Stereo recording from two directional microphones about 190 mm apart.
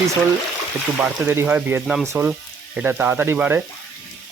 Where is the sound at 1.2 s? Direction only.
10° right (ahead or behind).